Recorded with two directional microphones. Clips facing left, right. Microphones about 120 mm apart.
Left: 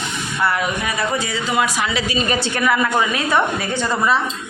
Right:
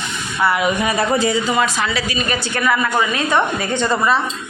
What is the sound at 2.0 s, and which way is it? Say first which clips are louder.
Speech: left 2 dB; 30° left (ahead or behind).